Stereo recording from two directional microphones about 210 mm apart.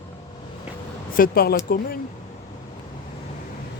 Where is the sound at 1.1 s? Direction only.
45° left (ahead or behind).